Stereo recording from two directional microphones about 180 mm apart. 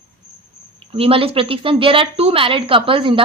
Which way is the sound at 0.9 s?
30° right (ahead or behind).